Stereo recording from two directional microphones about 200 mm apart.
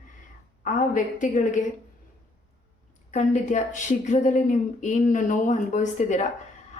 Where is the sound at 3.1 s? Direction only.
35° left (ahead or behind).